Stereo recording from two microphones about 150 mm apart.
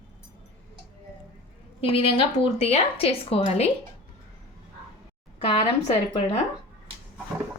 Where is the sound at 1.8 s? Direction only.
40° left (ahead or behind).